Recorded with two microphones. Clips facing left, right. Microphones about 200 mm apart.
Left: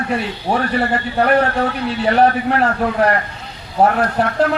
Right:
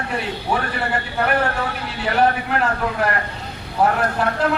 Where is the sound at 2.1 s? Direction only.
35° left (ahead or behind).